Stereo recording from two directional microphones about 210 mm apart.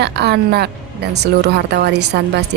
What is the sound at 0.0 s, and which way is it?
A woman's voice, 50° right (ahead or behind).